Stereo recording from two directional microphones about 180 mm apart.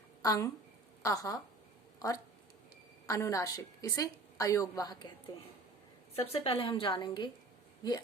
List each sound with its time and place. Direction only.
0.2 s a woman's voice: 20° left (ahead or behind)
6.1 s a woman's voice: 35° left (ahead or behind)